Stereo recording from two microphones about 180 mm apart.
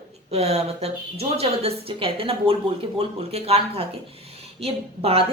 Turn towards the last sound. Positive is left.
turn(degrees=-30)  # may be behind; listen again after turning